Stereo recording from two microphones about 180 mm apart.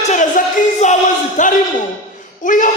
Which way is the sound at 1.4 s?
45° left (ahead or behind).